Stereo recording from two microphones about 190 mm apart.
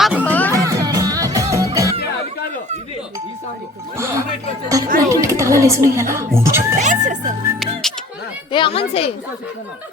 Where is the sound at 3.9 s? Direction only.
15° right (ahead or behind).